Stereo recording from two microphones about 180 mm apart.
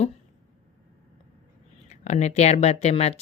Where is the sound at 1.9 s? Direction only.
40° left (ahead or behind).